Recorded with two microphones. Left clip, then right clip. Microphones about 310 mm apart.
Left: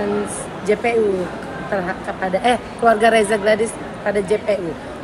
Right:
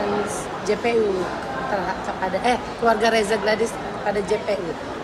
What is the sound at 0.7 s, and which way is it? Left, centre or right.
Speech, left.